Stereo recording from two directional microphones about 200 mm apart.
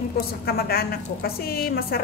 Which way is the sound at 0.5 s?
50° left (ahead or behind).